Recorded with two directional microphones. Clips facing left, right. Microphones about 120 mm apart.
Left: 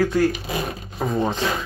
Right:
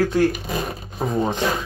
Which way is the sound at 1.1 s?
10° right (ahead or behind).